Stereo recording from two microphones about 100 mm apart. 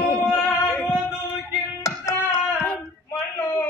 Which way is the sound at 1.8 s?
30° left (ahead or behind).